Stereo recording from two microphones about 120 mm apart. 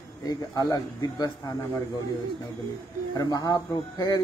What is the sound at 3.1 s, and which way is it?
Speech, 35° left (ahead or behind).